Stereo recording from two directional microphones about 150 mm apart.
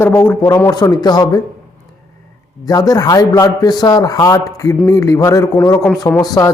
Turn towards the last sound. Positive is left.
turn(degrees=25)  # may be behind; listen again after turning